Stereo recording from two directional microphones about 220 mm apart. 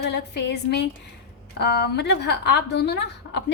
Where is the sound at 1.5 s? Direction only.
50° left (ahead or behind).